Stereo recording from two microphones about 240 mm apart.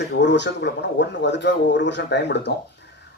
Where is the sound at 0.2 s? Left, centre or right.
Left.